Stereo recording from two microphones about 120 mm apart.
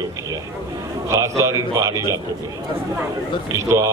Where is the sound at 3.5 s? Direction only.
25° right (ahead or behind).